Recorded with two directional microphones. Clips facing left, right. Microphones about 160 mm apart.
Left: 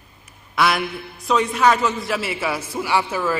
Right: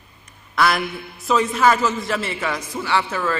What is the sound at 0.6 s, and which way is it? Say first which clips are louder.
A man's voice: even; centre (ahead or behind).